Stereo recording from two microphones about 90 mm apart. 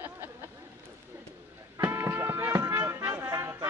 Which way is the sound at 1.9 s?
25° right (ahead or behind).